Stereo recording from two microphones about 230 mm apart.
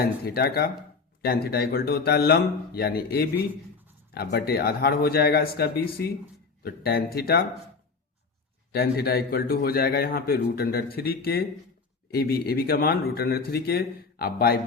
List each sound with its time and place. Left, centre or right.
0.0 s a man's voice: left
8.7 s a man's voice: left